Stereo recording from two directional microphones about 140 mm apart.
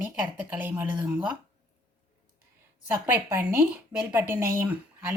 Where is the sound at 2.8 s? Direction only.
15° right (ahead or behind).